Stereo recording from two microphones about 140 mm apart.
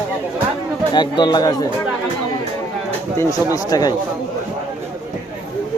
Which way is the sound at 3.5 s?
25° left (ahead or behind).